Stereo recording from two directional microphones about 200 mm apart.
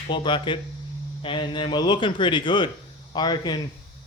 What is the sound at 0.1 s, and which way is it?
Speech, 25° left (ahead or behind).